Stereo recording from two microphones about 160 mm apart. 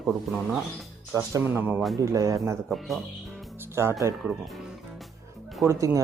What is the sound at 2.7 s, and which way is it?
Speech, centre (ahead or behind).